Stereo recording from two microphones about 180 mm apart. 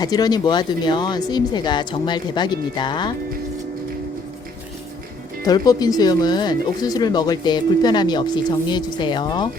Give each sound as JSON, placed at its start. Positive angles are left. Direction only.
{"t": 0.0, "sound": "speech", "side_deg": 20}
{"t": 5.5, "sound": "speech", "side_deg": 20}